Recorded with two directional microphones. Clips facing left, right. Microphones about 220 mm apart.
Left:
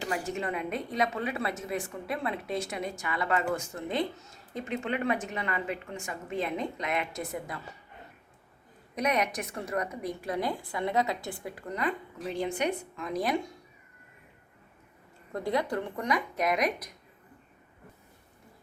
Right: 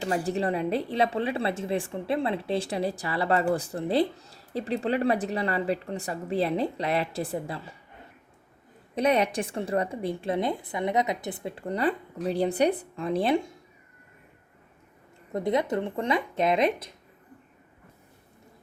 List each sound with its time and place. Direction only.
0.0 s a woman's voice: 35° right (ahead or behind)
9.0 s a woman's voice: 30° right (ahead or behind)
15.3 s a woman's voice: 20° right (ahead or behind)